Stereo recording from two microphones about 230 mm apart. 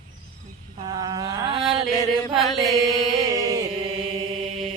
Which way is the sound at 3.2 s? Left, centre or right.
Centre.